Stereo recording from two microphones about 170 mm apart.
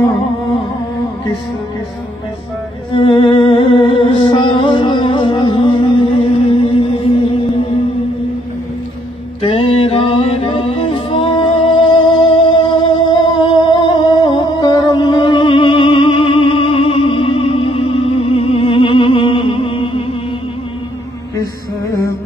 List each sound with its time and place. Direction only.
2.9 s music: 30° left (ahead or behind)
9.4 s music: 30° left (ahead or behind)